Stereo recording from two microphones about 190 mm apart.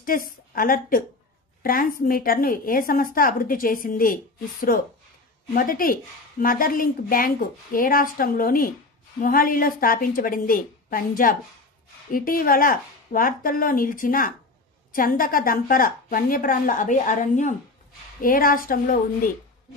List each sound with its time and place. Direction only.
0.0 s a woman's voice: 50° left (ahead or behind)